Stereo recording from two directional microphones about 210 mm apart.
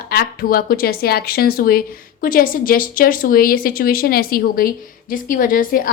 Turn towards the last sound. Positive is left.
turn(degrees=40)  # may be behind; listen again after turning